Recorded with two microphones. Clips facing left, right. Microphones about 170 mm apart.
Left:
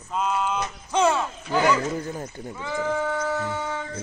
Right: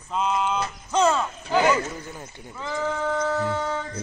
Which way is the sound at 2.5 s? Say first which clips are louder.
Left 1 dB; 10° left (ahead or behind).